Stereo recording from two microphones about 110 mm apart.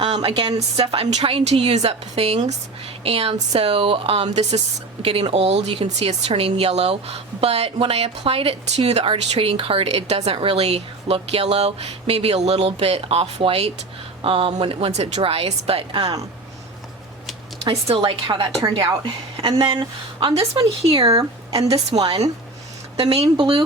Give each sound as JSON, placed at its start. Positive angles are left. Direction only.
{"t": 0.0, "sound": "a sound", "side_deg": -60}
{"t": 0.8, "sound": "speech", "side_deg": -70}
{"t": 3.0, "sound": "speech", "side_deg": -60}
{"t": 5.0, "sound": "speech", "side_deg": -60}
{"t": 17.7, "sound": "a woman's voice", "side_deg": -55}
{"t": 23.0, "sound": "speech", "side_deg": -60}
{"t": 23.4, "sound": "speech", "side_deg": -45}